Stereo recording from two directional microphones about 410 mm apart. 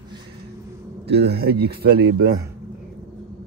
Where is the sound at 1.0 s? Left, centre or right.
Right.